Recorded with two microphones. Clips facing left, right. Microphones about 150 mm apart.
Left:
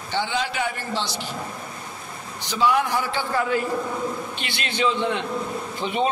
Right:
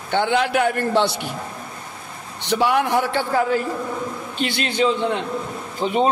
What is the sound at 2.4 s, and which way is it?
A man's voice, 65° right (ahead or behind).